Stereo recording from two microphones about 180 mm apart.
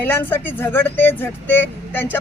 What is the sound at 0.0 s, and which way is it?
A man's voice, 10° left (ahead or behind).